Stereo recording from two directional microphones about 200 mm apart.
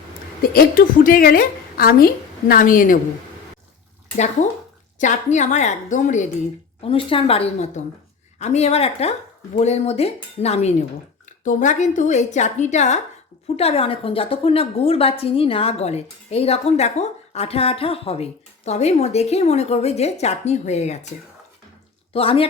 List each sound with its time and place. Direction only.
0.5 s a woman's voice: 45° left (ahead or behind)
4.9 s a woman's voice: 40° left (ahead or behind)
6.8 s a woman's voice: 25° left (ahead or behind)
22.1 s a woman's voice: 30° left (ahead or behind)